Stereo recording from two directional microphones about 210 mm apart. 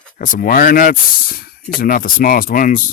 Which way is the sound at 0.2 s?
40° left (ahead or behind).